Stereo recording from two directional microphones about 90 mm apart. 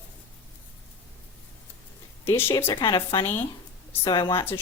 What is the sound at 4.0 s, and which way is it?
Speech, 55° left (ahead or behind).